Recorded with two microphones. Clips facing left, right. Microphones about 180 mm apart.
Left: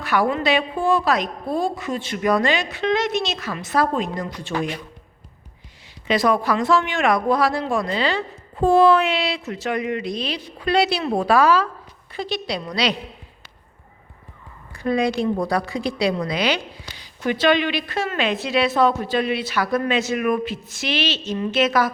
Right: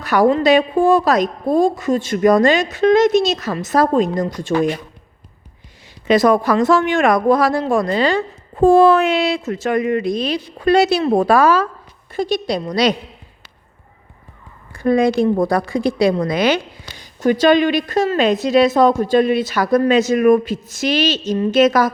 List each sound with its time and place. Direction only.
0.0 s a woman's voice: 40° right (ahead or behind)
6.1 s a woman's voice: 45° right (ahead or behind)
14.7 s a woman's voice: 50° right (ahead or behind)